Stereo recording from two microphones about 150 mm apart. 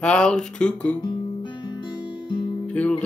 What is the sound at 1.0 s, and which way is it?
Guitar, 30° left (ahead or behind).